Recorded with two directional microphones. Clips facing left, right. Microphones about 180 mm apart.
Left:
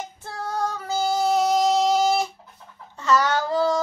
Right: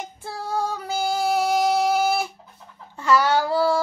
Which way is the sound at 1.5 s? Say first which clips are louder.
Left 1 dB; 5° right (ahead or behind).